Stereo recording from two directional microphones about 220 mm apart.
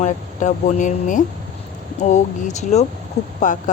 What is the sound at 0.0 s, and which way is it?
Speech, 35° left (ahead or behind).